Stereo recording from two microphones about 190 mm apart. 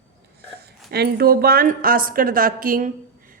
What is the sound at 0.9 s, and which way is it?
Speech, 55° right (ahead or behind).